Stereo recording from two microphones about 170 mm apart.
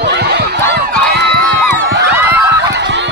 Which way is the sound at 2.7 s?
90° right.